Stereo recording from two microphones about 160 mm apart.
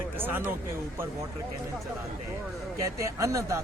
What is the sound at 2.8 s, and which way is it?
Speech, 20° right (ahead or behind).